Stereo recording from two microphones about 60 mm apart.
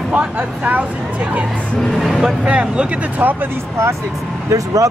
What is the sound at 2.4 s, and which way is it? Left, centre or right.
Speech, right.